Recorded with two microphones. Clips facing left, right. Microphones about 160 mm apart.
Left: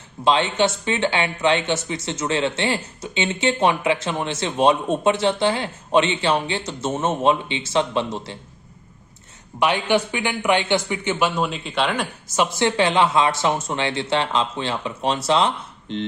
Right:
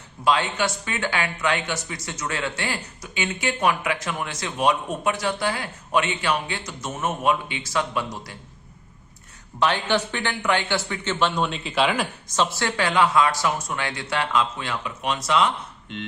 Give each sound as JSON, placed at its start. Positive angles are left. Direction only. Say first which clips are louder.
{"t": 0.3, "sound": "speech", "louder": "left 4 dB", "side_deg": 25}
{"t": 9.6, "sound": "speech", "louder": "left 3 dB", "side_deg": 15}
{"t": 12.4, "sound": "speech", "louder": "left 4 dB", "side_deg": 20}